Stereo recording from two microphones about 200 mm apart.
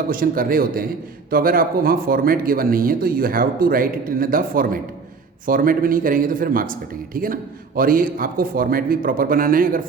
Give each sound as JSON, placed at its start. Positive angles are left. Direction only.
{"t": 0.1, "sound": "speech", "side_deg": -45}